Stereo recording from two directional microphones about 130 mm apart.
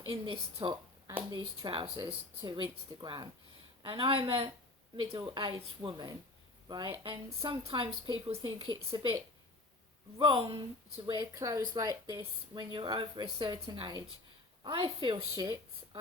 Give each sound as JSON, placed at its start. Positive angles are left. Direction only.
{"t": 0.0, "sound": "a woman's voice", "side_deg": -45}
{"t": 10.2, "sound": "speech", "side_deg": -45}
{"t": 11.0, "sound": "a woman's voice", "side_deg": -35}